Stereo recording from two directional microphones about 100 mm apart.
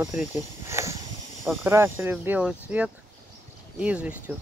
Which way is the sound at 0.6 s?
30° right (ahead or behind).